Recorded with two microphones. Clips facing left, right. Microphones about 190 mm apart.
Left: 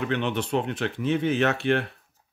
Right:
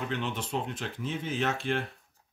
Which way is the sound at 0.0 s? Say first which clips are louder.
Left 7 dB; 70° left (ahead or behind).